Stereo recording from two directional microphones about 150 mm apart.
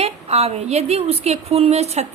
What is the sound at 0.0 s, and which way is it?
A woman's voice, 45° right (ahead or behind).